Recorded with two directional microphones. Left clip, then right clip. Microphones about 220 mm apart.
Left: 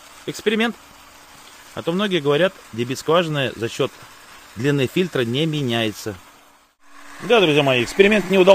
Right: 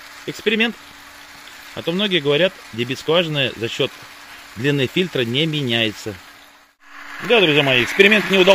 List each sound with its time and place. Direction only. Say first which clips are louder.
0.3 s speech: right 2 dB; centre (ahead or behind)
1.8 s speech: right 2 dB; centre (ahead or behind)
7.2 s speech: right 1 dB; 5° left (ahead or behind)